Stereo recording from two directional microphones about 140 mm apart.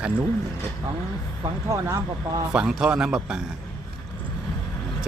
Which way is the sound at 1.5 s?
25° right (ahead or behind).